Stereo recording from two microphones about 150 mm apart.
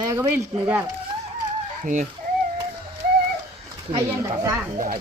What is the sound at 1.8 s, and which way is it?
Speech, 55° right (ahead or behind).